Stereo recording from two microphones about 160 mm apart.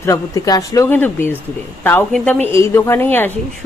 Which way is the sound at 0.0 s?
20° left (ahead or behind).